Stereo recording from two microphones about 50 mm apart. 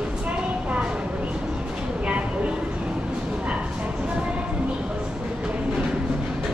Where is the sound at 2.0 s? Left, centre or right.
Right.